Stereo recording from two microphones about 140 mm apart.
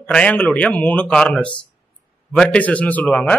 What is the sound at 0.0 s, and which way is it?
A man's voice, 10° left (ahead or behind).